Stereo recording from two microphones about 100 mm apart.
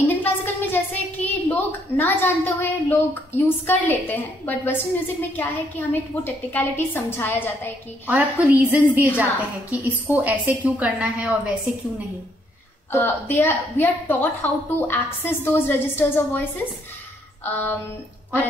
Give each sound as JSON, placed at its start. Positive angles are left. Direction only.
{"t": 0.1, "sound": "a sound", "side_deg": 20}
{"t": 3.3, "sound": "a woman's voice", "side_deg": 20}
{"t": 8.1, "sound": "a woman's voice", "side_deg": -15}
{"t": 12.9, "sound": "a woman's voice", "side_deg": 20}
{"t": 17.5, "sound": "a woman's voice", "side_deg": 20}